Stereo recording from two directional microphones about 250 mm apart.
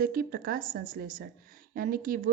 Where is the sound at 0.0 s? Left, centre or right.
Right.